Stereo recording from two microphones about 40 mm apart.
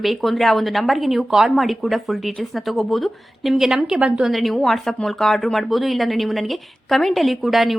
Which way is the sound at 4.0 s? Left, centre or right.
Right.